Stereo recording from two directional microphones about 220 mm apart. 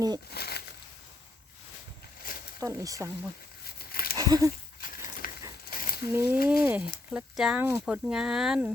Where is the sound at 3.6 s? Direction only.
45° left (ahead or behind).